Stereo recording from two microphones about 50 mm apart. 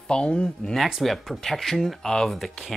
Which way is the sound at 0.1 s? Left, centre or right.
Centre.